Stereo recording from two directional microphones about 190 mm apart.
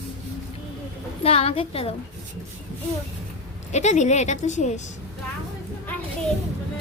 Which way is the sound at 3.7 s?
35° left (ahead or behind).